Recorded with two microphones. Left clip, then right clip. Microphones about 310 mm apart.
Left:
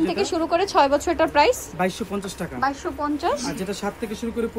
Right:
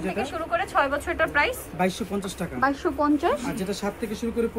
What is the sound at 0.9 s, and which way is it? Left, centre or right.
Speech, centre.